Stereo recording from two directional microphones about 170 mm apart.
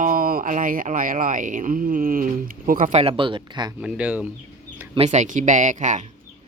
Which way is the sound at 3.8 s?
5° right (ahead or behind).